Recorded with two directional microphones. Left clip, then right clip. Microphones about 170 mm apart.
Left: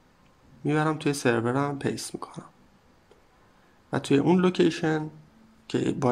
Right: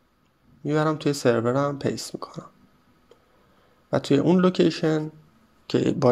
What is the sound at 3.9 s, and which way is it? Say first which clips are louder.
Speech: right 2 dB; 20° right (ahead or behind).